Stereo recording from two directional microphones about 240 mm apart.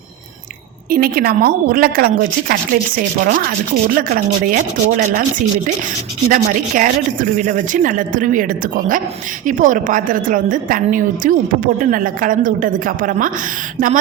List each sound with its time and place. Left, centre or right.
0.9 s a woman's voice: right
6.2 s a woman's voice: right